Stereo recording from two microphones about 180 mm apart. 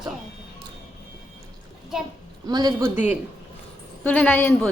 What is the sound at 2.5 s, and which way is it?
Speech, 20° right (ahead or behind).